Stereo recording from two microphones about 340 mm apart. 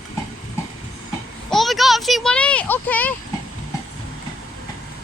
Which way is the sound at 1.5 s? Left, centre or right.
Centre.